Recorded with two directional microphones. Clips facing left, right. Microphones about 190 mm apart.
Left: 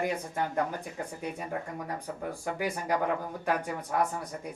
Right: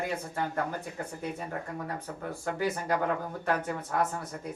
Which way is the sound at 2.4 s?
15° left (ahead or behind).